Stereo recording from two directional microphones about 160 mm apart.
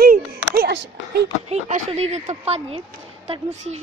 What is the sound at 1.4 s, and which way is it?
A woman's voice, 45° right (ahead or behind).